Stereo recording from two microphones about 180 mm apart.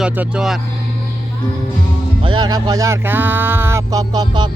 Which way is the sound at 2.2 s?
25° right (ahead or behind).